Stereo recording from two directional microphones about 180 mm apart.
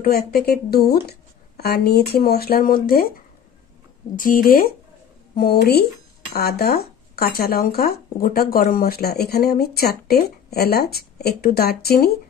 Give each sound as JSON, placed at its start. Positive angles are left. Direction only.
{"t": 0.0, "sound": "speech", "side_deg": 60}
{"t": 4.2, "sound": "speech", "side_deg": 50}